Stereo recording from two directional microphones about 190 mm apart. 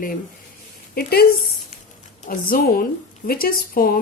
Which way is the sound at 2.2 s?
50° left (ahead or behind).